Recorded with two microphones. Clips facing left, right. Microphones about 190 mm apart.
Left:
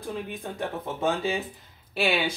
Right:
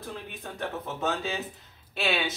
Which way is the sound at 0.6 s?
15° left (ahead or behind).